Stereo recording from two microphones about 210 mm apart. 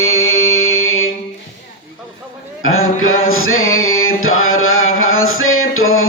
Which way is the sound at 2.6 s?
75° left (ahead or behind).